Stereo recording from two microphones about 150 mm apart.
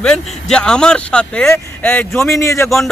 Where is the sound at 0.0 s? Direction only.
5° left (ahead or behind).